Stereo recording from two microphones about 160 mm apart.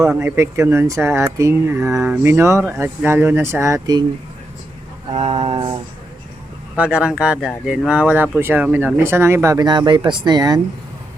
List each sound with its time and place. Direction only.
0.2 s speech: 15° right (ahead or behind)
5.1 s a sound: 35° right (ahead or behind)
6.7 s speech: 5° right (ahead or behind); by 10.6 s 25° right (ahead or behind)